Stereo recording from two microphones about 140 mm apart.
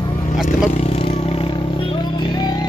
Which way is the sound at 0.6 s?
50° left (ahead or behind).